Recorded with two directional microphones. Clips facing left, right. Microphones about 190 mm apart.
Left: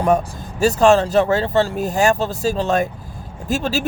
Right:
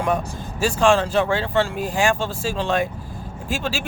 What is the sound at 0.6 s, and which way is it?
Speech, 40° left (ahead or behind).